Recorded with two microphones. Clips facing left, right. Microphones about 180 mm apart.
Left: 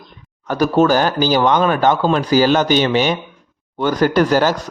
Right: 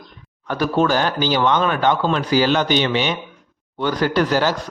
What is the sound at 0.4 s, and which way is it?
A man's voice, 40° left (ahead or behind).